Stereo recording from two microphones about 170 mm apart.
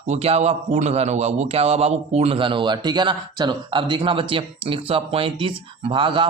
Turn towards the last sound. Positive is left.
turn(degrees=-30)  # may be behind; listen again after turning